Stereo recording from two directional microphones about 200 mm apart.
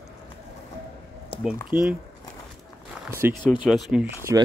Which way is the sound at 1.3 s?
25° left (ahead or behind).